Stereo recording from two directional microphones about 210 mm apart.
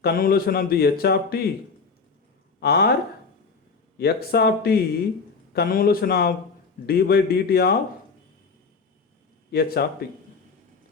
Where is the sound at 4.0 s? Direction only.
50° left (ahead or behind).